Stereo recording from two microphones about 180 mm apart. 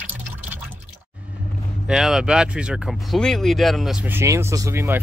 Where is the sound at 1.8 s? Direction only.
5° right (ahead or behind).